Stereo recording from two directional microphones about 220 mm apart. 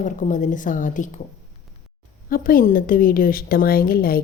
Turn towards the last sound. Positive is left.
turn(degrees=40)  # may be behind; listen again after turning